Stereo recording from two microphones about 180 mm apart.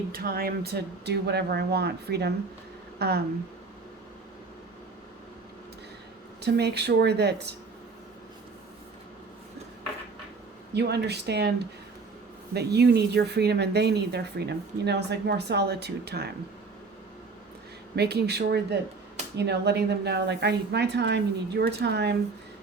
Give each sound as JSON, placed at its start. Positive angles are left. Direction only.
{"t": 0.1, "sound": "speech", "side_deg": -55}
{"t": 6.4, "sound": "speech", "side_deg": -65}
{"t": 10.8, "sound": "speech", "side_deg": -65}
{"t": 17.9, "sound": "speech", "side_deg": -65}